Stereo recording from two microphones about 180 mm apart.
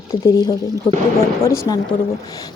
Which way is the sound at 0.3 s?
25° left (ahead or behind).